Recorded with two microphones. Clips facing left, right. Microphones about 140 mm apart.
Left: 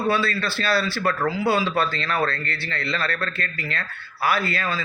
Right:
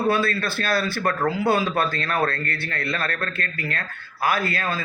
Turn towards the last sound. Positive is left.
turn(degrees=-50)  # may be behind; listen again after turning